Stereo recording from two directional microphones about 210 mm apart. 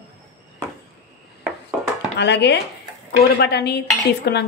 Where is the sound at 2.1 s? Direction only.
55° left (ahead or behind).